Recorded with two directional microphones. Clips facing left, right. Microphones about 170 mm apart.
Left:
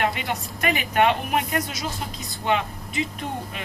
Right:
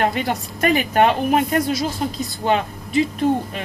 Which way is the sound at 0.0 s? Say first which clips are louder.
Right 5 dB; 40° right (ahead or behind).